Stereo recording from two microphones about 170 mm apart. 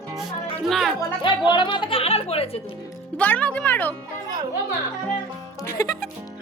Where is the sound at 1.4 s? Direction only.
30° left (ahead or behind).